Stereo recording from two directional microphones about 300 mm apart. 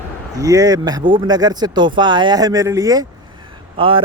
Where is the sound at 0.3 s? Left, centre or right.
Centre.